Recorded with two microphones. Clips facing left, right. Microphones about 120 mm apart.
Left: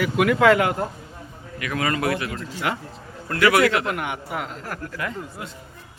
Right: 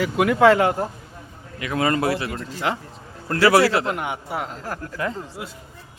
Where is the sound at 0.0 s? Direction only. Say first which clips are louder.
Right 2 dB; 25° right (ahead or behind).